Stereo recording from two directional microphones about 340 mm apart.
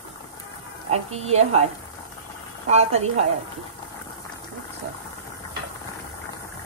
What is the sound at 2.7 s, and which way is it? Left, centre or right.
Speech, centre.